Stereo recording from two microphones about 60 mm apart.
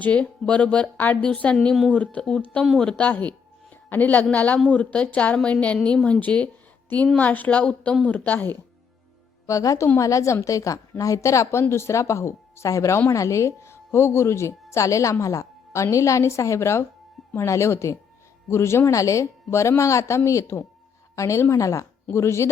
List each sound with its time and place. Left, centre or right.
0.0 s speech: centre
1.5 s a woman's voice: centre
1.9 s speech: left
2.6 s a woman's voice: centre
3.0 s speech: left
9.5 s a woman's voice: left
12.7 s a woman's voice: left
18.9 s a woman's voice: left
22.1 s speech: left